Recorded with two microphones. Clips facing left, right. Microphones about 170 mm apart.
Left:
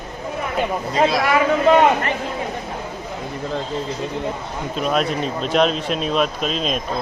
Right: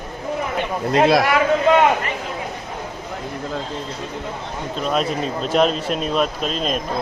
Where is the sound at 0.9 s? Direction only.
65° right (ahead or behind).